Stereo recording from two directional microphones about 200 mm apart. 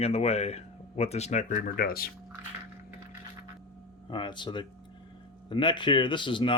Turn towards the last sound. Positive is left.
turn(degrees=25)  # may be behind; listen again after turning